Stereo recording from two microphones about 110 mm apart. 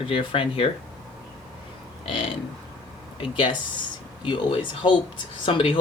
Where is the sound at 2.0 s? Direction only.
55° left (ahead or behind).